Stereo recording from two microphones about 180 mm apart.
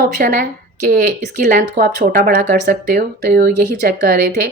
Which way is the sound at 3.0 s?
60° right (ahead or behind).